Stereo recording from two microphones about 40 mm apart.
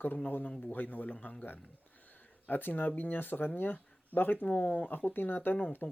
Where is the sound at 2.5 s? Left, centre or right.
Left.